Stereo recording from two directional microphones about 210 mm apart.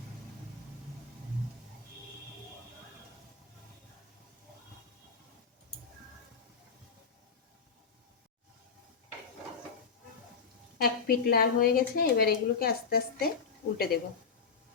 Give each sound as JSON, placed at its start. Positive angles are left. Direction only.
{"t": 10.8, "sound": "a woman's voice", "side_deg": 45}